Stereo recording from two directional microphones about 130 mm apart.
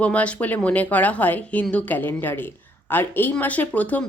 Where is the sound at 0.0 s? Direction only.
10° left (ahead or behind).